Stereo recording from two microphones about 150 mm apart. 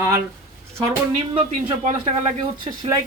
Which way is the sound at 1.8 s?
50° right (ahead or behind).